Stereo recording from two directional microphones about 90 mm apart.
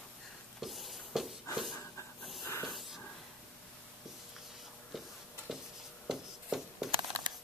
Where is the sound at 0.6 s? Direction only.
Centre (ahead or behind).